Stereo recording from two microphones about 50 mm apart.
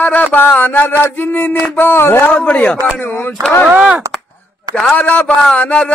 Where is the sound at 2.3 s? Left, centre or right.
Left.